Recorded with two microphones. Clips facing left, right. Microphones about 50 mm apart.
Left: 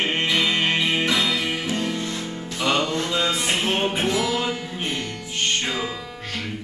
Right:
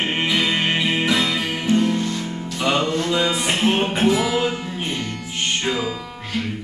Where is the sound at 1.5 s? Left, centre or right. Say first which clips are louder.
Right 6 dB; centre.